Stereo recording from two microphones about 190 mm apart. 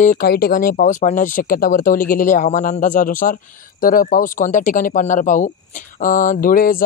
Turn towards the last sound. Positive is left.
turn(degrees=50)  # may be behind; listen again after turning